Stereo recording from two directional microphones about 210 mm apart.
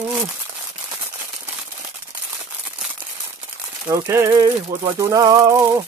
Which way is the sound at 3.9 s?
15° right (ahead or behind).